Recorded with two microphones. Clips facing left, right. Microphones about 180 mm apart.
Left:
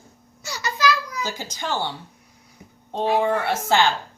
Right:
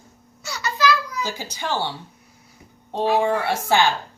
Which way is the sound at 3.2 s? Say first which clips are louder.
Right 1 dB; 10° right (ahead or behind).